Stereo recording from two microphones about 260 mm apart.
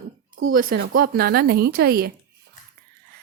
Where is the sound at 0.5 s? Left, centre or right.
Right.